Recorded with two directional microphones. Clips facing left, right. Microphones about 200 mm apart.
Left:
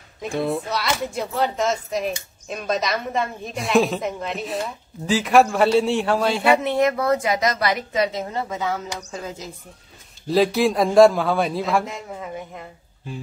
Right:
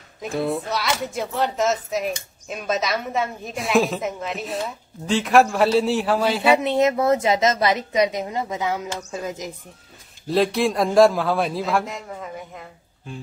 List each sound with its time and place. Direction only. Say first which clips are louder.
0.2 s speech: even; centre (ahead or behind)
6.6 s a woman's voice: right 1 dB; 20° right (ahead or behind)
10.2 s speech: left 2 dB; centre (ahead or behind)